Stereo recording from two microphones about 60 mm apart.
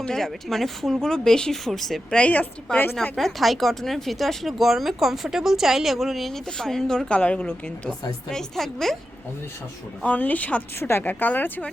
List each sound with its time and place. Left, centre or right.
0.0 s speech: centre
2.1 s speech: left
2.7 s speech: centre
10.0 s speech: left
10.8 s speech: left
11.1 s speech: left